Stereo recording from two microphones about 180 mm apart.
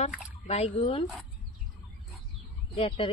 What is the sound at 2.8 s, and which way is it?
Speech, 35° left (ahead or behind).